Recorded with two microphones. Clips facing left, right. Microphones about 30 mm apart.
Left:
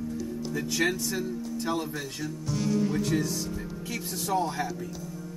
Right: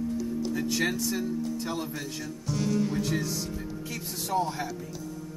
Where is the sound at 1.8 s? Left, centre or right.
Centre.